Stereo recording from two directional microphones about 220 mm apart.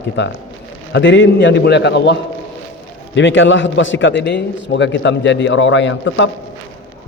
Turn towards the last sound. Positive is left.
turn(degrees=55)  # may be behind; listen again after turning